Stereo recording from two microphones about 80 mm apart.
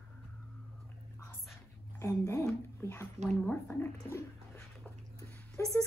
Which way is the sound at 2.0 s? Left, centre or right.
Left.